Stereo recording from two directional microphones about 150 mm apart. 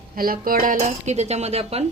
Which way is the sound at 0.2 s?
75° right (ahead or behind).